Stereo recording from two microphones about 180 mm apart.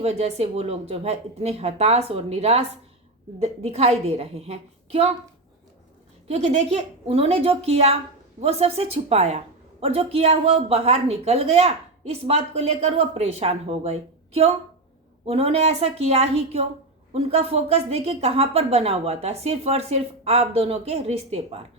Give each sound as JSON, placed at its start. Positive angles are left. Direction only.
{"t": 0.0, "sound": "a woman's voice", "side_deg": -35}
{"t": 6.2, "sound": "a woman's voice", "side_deg": -35}